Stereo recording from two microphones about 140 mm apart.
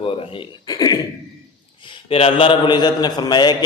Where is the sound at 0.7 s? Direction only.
30° left (ahead or behind).